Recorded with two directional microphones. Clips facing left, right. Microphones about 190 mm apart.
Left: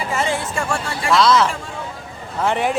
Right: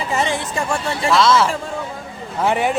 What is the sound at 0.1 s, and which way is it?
Speech, 20° right (ahead or behind).